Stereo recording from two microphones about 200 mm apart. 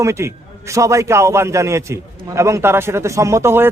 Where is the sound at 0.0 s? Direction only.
15° right (ahead or behind).